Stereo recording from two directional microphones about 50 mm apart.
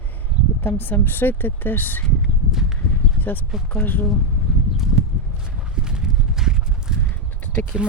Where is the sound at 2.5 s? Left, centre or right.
Centre.